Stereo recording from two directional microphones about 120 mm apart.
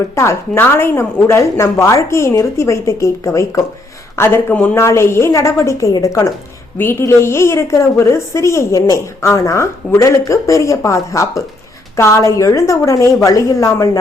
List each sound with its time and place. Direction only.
0.2 s a woman's voice: 20° left (ahead or behind)